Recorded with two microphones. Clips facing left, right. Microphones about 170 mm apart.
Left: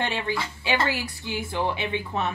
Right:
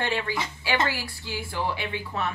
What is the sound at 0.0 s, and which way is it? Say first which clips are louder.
A woman's voice: even; 20° left (ahead or behind).